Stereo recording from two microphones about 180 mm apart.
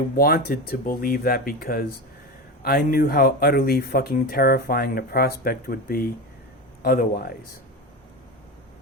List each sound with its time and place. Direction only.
0.2 s speech: 55° left (ahead or behind)